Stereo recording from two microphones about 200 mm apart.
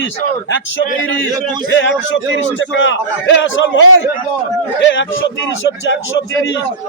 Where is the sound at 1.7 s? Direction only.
65° left (ahead or behind).